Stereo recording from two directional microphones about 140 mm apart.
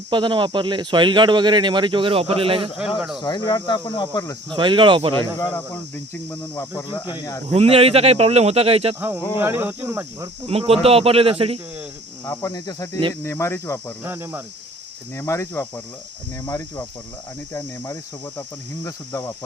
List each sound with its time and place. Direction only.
0.1 s speech: 35° right (ahead or behind)
3.2 s speech: 30° left (ahead or behind)
4.5 s speech: 35° right (ahead or behind)
5.1 s speech: 15° left (ahead or behind)
7.0 s speech: 35° left (ahead or behind)
7.5 s speech: 45° right (ahead or behind)
9.0 s speech: 15° right (ahead or behind)
10.4 s speech: 45° right (ahead or behind)
12.2 s speech: 20° left (ahead or behind)
14.0 s speech: 15° right (ahead or behind)
15.1 s speech: 20° left (ahead or behind)